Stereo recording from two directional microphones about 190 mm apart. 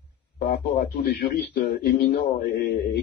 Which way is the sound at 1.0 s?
60° left (ahead or behind).